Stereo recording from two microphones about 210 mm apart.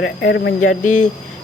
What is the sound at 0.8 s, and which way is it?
Speech, 35° left (ahead or behind).